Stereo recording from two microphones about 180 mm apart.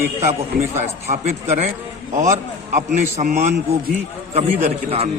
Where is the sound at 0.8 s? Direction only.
40° right (ahead or behind).